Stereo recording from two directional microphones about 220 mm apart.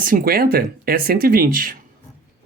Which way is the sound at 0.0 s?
40° right (ahead or behind).